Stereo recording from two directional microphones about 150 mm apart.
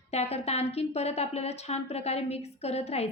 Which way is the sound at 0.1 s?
45° left (ahead or behind).